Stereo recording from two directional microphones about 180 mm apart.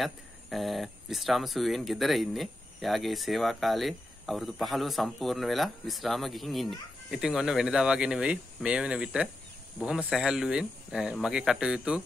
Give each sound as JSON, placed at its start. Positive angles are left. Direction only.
{"t": 0.0, "sound": "speech", "side_deg": 0}